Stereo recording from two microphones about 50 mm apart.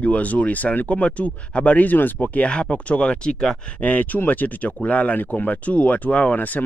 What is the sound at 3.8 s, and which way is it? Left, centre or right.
Speech, left.